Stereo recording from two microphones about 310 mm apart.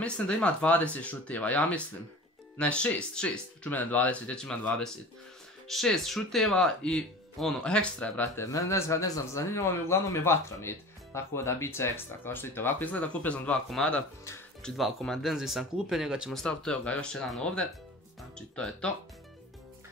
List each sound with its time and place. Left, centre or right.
0.0 s speech: centre